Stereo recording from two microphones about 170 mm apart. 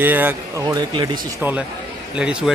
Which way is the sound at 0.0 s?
10° right (ahead or behind).